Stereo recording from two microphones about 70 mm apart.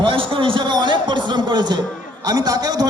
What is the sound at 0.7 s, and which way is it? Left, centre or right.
A man's voice, right.